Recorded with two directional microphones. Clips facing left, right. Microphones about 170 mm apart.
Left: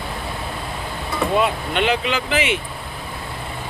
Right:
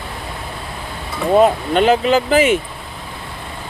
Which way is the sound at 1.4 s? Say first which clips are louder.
Right 10 dB; 40° right (ahead or behind).